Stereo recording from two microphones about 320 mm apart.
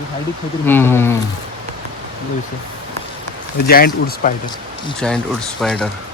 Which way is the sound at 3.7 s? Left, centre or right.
Left.